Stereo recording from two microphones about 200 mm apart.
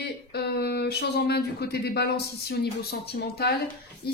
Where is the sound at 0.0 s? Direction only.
55° left (ahead or behind).